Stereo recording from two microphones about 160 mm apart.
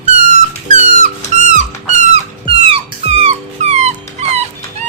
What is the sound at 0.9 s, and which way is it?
Squeak, 50° right (ahead or behind).